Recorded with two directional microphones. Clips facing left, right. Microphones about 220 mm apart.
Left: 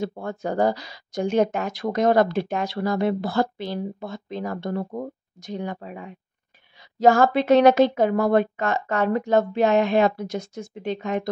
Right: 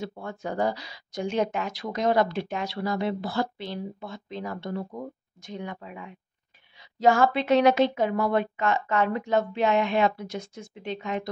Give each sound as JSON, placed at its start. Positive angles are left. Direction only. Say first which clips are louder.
{"t": 0.0, "sound": "speech", "louder": "left 6 dB", "side_deg": 45}
{"t": 5.5, "sound": "speech", "louder": "left 5 dB", "side_deg": 35}